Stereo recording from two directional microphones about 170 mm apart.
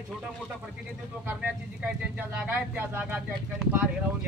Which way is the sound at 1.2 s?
10° right (ahead or behind).